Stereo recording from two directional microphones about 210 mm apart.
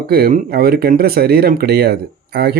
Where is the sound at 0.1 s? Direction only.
45° right (ahead or behind).